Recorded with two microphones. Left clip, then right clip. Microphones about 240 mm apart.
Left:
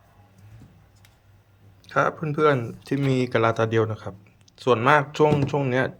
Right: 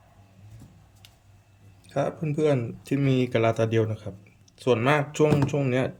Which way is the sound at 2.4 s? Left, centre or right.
Centre.